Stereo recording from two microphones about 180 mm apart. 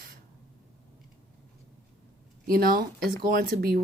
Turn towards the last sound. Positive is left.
turn(degrees=-55)  # may be behind; listen again after turning